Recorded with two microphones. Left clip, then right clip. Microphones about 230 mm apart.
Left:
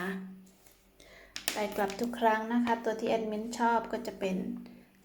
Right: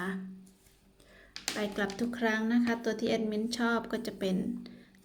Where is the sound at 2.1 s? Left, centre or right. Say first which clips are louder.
Left 3 dB; right.